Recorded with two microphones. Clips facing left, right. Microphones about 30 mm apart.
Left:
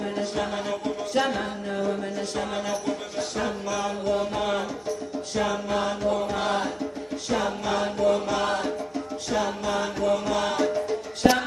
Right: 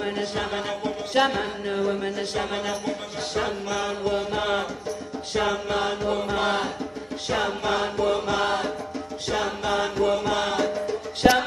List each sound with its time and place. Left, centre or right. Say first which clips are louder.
0.0 s music: right 1 dB; right
1.4 s music: right 2 dB; right
10.5 s music: even; centre